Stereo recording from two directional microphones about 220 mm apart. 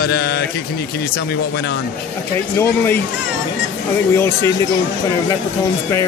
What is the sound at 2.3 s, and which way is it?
Speech, 10° left (ahead or behind).